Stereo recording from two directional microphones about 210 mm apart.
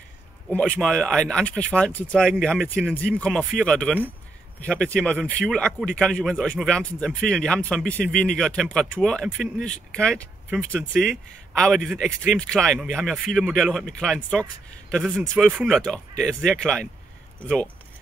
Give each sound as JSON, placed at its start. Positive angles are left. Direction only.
{"t": 0.6, "sound": "speech", "side_deg": 0}